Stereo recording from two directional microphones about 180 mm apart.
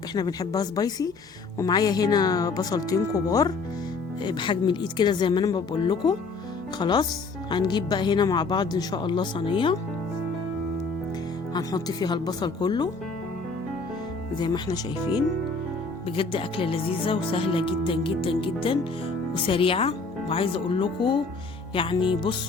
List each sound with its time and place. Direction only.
0.1 s speech: 20° left (ahead or behind)
11.5 s speech: 20° left (ahead or behind)
14.3 s speech: 25° left (ahead or behind)